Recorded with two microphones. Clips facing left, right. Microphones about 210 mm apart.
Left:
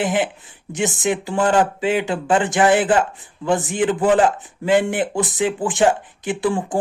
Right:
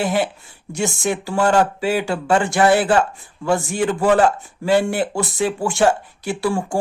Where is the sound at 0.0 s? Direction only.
20° left (ahead or behind).